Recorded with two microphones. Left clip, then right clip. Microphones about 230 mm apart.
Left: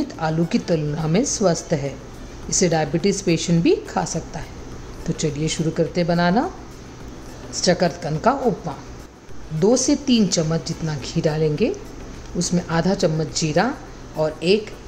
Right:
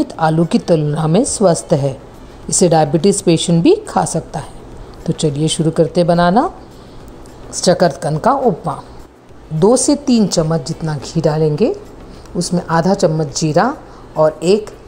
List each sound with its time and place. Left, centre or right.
0.0 s a woman's voice: right
7.5 s a woman's voice: right